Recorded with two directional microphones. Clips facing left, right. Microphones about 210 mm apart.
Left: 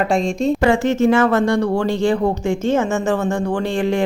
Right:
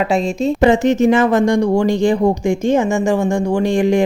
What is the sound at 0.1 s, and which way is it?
Speech, centre (ahead or behind).